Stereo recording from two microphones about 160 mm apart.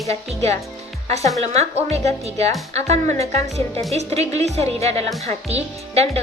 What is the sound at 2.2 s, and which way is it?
A woman's voice, 40° right (ahead or behind).